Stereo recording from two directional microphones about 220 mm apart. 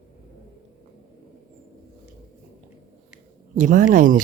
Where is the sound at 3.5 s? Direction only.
35° right (ahead or behind).